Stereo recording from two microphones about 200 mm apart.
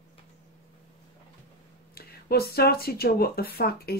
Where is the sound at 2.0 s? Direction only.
50° left (ahead or behind).